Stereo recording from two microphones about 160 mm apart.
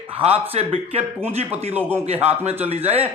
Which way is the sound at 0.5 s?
40° right (ahead or behind).